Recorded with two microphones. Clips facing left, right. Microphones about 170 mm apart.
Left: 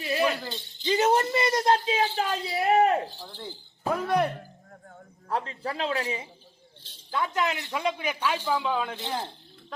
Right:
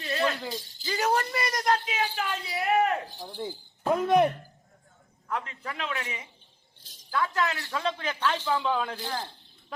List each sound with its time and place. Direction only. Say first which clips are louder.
0.0 s rattle: left 2 dB; 10° left (ahead or behind)
0.9 s speech: left 4 dB; 25° left (ahead or behind)
3.1 s speech: right 4 dB; 15° right (ahead or behind)
4.7 s a sound: left 12 dB; 65° left (ahead or behind)
5.3 s a man's voice: left 4 dB; 30° left (ahead or behind); by 9.0 s centre (ahead or behind)
9.0 s speech: left 2 dB; 25° left (ahead or behind)